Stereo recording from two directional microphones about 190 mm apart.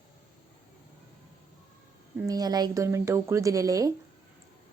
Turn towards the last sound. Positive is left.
turn(degrees=-20)  # may be behind; listen again after turning